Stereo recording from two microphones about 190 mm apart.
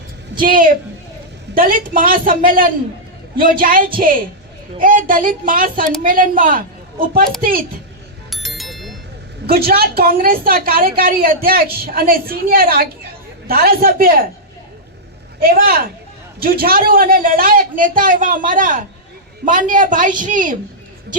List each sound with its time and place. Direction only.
0.4 s a woman's voice: 45° right (ahead or behind)
8.3 s bicycle bell: centre (ahead or behind)
9.5 s a woman's voice: 55° right (ahead or behind)
15.4 s a woman's voice: 50° right (ahead or behind)